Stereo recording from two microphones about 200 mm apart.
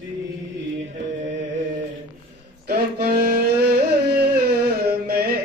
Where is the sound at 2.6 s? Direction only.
55° right (ahead or behind).